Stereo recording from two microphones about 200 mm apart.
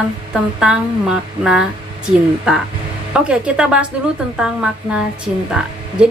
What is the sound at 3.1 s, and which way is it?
A woman's voice, 5° right (ahead or behind).